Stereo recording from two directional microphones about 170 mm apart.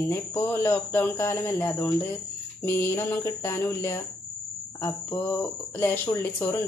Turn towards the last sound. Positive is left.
turn(degrees=15)  # may be behind; listen again after turning